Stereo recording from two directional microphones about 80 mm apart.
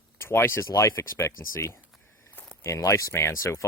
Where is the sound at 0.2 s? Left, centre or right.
Left.